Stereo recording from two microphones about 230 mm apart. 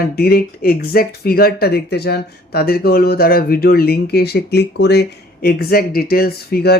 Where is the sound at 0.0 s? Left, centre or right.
Left.